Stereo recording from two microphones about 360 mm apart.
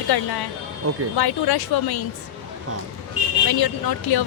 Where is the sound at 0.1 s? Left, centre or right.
Left.